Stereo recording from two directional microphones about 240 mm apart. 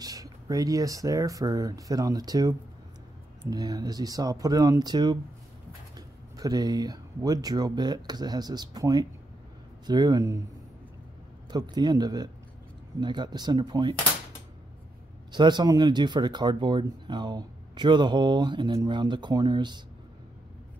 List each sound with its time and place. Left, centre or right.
0.0 s speech: centre
11.5 s speech: centre
15.3 s speech: centre